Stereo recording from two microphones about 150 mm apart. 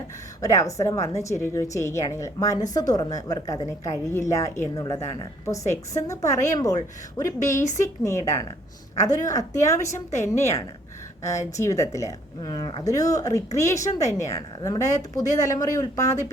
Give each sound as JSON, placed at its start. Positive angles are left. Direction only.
{"t": 0.4, "sound": "a woman's voice", "side_deg": 20}